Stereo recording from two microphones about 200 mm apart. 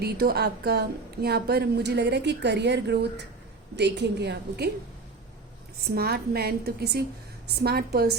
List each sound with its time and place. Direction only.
0.0 s a woman's voice: 50° right (ahead or behind)
5.9 s a woman's voice: 50° right (ahead or behind)